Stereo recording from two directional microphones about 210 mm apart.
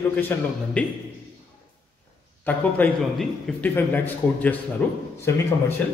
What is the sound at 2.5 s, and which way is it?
A man's voice, 10° left (ahead or behind).